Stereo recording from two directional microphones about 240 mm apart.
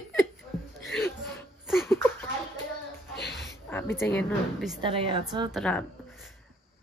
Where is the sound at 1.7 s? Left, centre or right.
Centre.